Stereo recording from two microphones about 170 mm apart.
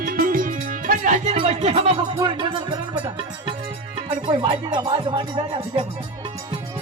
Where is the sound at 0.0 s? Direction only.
60° right (ahead or behind); by 1.8 s 35° right (ahead or behind).